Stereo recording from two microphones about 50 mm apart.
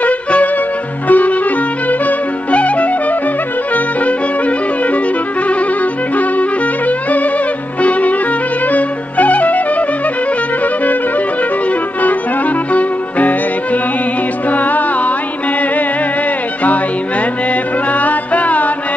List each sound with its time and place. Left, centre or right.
0.0 s music: left
6.9 s music: left
12.7 s music: left
14.5 s music: left
17.9 s music: left